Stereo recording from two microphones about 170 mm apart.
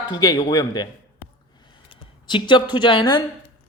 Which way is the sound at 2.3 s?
30° left (ahead or behind).